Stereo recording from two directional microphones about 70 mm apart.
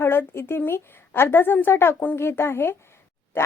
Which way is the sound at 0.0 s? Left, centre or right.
Left.